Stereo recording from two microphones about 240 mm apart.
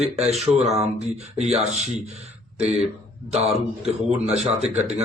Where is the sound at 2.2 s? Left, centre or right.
Right.